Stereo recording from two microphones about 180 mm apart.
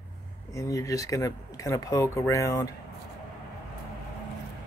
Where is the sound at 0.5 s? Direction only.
20° left (ahead or behind).